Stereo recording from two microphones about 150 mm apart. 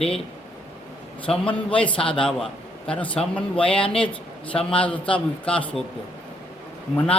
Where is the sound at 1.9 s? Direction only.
35° left (ahead or behind).